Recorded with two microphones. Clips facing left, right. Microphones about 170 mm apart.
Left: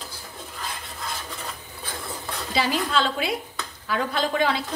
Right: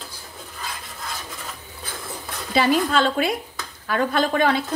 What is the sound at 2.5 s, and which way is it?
A woman's voice, 50° right (ahead or behind).